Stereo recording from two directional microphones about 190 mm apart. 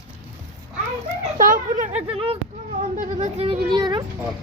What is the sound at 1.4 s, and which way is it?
A child's voice, 45° right (ahead or behind).